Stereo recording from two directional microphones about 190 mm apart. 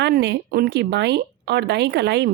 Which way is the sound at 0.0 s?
65° right (ahead or behind).